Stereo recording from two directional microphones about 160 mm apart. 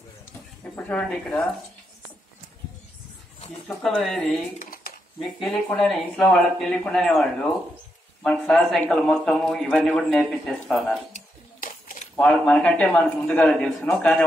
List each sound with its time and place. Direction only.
0.7 s a man's voice: 10° left (ahead or behind)
3.6 s speech: centre (ahead or behind)
4.6 s a sound: 60° left (ahead or behind)
5.2 s speech: centre (ahead or behind)
11.1 s a sound: 50° left (ahead or behind)
12.2 s a man's voice: 5° left (ahead or behind)